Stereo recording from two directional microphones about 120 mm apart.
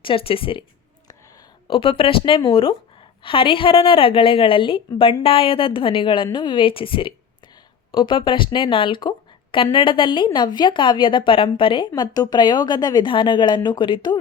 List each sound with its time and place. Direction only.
0.0 s a woman's voice: 50° left (ahead or behind)
1.6 s a woman's voice: 45° left (ahead or behind)
11.9 s a woman's voice: 35° left (ahead or behind)